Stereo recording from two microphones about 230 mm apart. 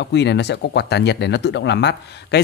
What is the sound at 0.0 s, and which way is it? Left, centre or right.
Speech, left.